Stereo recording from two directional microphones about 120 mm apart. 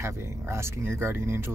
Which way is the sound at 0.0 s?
25° right (ahead or behind).